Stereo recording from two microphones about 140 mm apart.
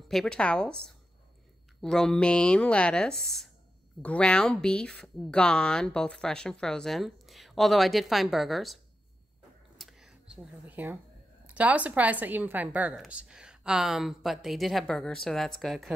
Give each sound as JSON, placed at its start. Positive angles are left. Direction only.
{"t": 0.1, "sound": "speech", "side_deg": 5}
{"t": 9.8, "sound": "a sound", "side_deg": -5}
{"t": 11.5, "sound": "a woman's voice", "side_deg": -10}